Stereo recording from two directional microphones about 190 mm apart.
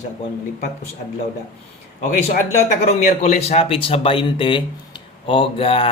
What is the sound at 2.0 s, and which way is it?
Speech, 45° left (ahead or behind).